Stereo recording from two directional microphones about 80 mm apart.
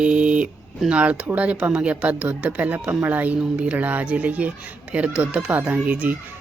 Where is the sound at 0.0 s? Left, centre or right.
Centre.